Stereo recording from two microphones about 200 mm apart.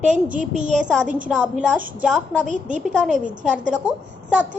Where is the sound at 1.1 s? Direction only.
5° right (ahead or behind).